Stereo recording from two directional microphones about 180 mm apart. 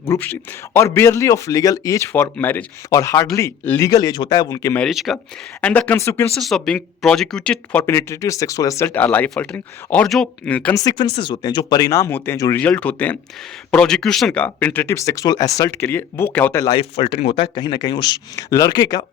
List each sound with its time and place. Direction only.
0.0 s speech: 10° left (ahead or behind)
4.8 s speech: centre (ahead or behind)
6.3 s speech: centre (ahead or behind)
10.8 s speech: 25° left (ahead or behind)
17.2 s speech: 35° left (ahead or behind)